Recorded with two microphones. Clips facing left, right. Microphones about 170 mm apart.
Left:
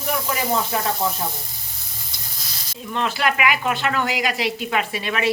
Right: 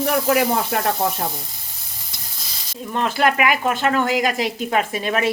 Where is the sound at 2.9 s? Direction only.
45° right (ahead or behind).